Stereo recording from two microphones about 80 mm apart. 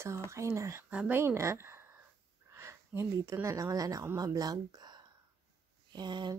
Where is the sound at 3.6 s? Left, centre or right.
Right.